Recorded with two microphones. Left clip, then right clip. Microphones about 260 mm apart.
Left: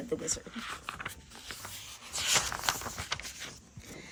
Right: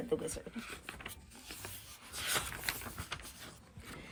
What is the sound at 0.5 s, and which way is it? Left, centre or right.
Speech, centre.